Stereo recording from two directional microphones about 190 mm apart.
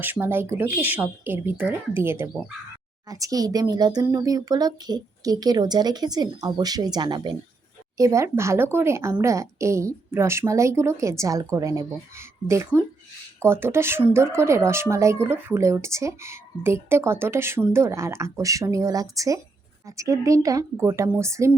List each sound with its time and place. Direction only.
0.0 s speech: 10° right (ahead or behind)